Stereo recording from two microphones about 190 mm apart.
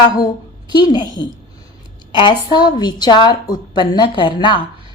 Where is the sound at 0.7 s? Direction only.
25° left (ahead or behind).